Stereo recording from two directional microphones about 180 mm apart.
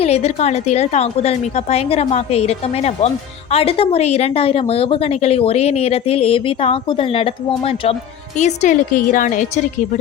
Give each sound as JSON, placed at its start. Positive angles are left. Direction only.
{"t": 0.0, "sound": "a woman's voice", "side_deg": 35}